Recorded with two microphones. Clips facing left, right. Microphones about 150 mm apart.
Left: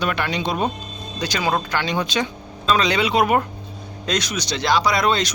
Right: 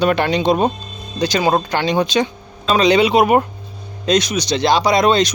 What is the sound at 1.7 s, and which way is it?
Speech, 20° right (ahead or behind).